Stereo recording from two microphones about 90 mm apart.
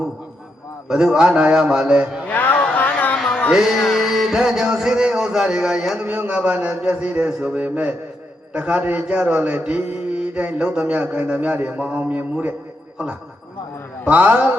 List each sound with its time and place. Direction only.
0.9 s music: 10° right (ahead or behind)
2.3 s a sound: 20° left (ahead or behind)
3.5 s music: 5° right (ahead or behind)
14.1 s music: 15° right (ahead or behind)